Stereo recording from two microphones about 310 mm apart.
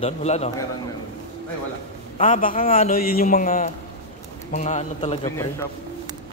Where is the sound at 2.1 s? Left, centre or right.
Left.